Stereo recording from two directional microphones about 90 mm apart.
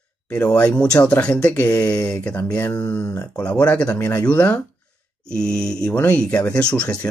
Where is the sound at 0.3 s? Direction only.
15° left (ahead or behind).